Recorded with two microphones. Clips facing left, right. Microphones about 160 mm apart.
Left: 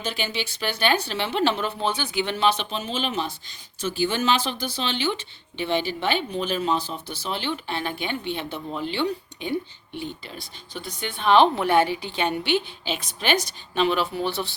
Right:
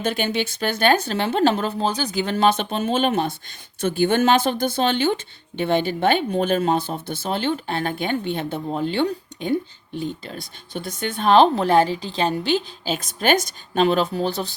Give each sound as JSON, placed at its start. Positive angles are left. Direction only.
{"t": 0.0, "sound": "a woman's voice", "side_deg": -50}